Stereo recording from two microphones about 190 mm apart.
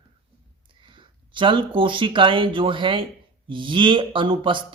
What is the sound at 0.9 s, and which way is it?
Speech, 25° right (ahead or behind).